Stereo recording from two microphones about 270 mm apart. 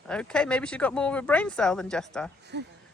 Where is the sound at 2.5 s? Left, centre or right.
Right.